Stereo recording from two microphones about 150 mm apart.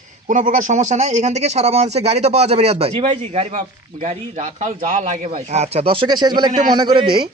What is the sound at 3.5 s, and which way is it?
A man's voice, 50° right (ahead or behind).